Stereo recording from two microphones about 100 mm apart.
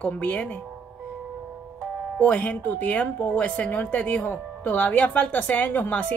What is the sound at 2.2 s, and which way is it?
Speech, 15° left (ahead or behind).